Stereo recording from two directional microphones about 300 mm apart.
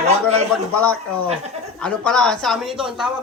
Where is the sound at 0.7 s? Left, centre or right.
Centre.